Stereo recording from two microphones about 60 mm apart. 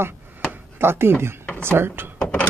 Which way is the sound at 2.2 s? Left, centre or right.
Left.